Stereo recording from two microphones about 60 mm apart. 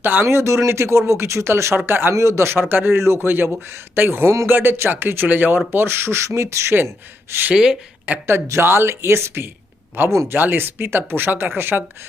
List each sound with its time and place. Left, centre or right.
0.0 s speech: right
0.3 s speech: right
2.1 s speech: right
7.5 s speech: centre
8.1 s speech: right
8.6 s speech: right
10.2 s speech: right